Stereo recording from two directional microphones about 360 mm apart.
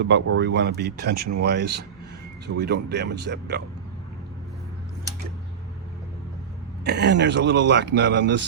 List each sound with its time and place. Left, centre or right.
0.0 s speech: right
6.8 s speech: right